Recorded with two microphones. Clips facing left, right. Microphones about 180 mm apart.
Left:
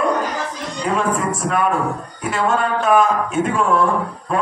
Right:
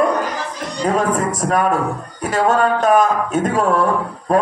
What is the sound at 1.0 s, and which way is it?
Speech, 40° right (ahead or behind).